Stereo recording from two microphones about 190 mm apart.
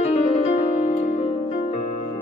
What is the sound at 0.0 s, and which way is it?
Music, 35° left (ahead or behind).